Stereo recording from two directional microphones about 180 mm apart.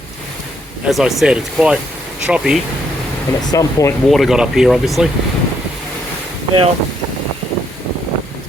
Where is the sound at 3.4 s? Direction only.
20° left (ahead or behind).